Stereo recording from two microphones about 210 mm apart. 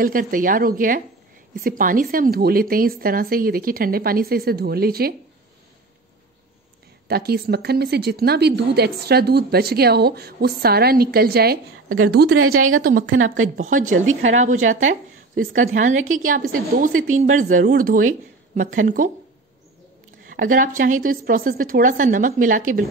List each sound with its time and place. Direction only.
0.0 s a woman's voice: 40° right (ahead or behind)
7.1 s a woman's voice: 50° right (ahead or behind)
12.3 s a woman's voice: 90° right
13.0 s speech: 70° right (ahead or behind)
13.3 s a woman's voice: 40° right (ahead or behind)
20.2 s a woman's voice: 40° right (ahead or behind)